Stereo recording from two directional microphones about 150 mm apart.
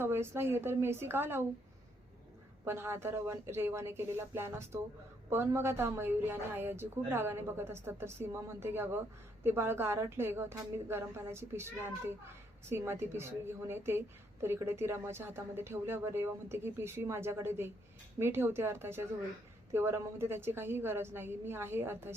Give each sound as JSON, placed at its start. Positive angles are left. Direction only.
{"t": 0.0, "sound": "a woman's voice", "side_deg": -15}
{"t": 2.6, "sound": "a woman's voice", "side_deg": -15}
{"t": 12.6, "sound": "a woman's voice", "side_deg": -15}